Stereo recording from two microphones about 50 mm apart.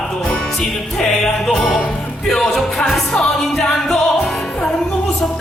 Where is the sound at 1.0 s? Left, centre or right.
Centre.